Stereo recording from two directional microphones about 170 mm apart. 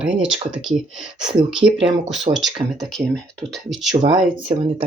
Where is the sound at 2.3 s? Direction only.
Centre (ahead or behind).